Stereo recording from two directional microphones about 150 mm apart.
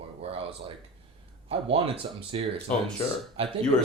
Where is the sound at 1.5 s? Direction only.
40° right (ahead or behind).